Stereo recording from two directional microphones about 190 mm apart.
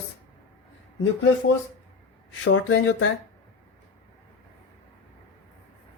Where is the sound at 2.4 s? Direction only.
80° left.